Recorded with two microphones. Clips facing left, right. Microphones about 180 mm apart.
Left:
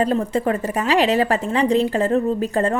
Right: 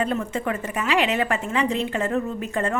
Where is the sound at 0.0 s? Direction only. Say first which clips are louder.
Left 6 dB; 35° left (ahead or behind).